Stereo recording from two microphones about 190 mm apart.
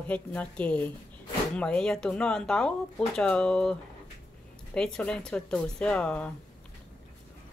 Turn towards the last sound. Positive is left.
turn(degrees=5)  # may be behind; listen again after turning